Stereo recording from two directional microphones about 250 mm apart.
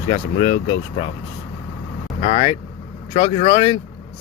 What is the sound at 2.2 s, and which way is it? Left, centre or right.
Speech, left.